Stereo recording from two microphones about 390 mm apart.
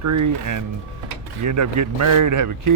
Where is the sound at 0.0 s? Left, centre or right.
Right.